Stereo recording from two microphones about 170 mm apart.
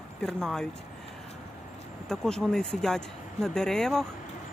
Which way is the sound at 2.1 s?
5° left (ahead or behind).